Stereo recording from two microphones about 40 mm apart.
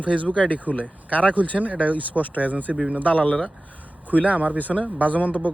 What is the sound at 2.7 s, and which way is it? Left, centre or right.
Speech, centre.